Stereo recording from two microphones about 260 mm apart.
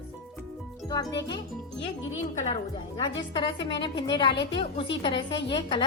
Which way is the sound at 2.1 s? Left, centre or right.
Left.